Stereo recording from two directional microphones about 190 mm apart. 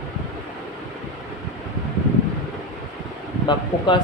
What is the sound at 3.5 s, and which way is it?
Speech, 25° left (ahead or behind).